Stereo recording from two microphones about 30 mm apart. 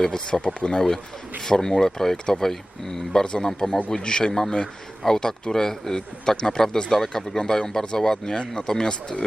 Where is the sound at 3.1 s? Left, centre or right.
Left.